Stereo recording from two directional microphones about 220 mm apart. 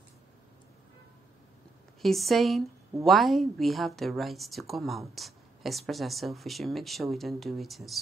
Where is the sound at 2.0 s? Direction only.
Centre (ahead or behind).